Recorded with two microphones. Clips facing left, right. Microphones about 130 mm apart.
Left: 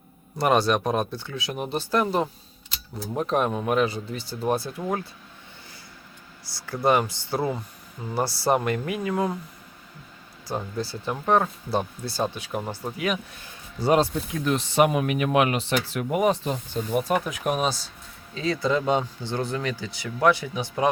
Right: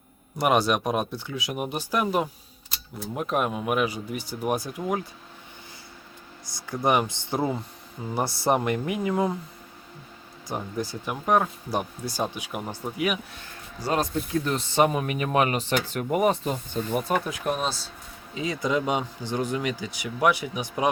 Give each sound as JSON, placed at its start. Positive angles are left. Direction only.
{"t": 0.3, "sound": "speech", "side_deg": -10}
{"t": 6.6, "sound": "speech", "side_deg": -15}
{"t": 10.5, "sound": "speech", "side_deg": -15}
{"t": 13.8, "sound": "speech", "side_deg": 20}
{"t": 14.3, "sound": "speech", "side_deg": 0}
{"t": 18.3, "sound": "speech", "side_deg": -15}